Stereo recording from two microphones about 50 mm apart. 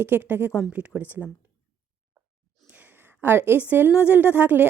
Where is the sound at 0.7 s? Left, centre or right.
Right.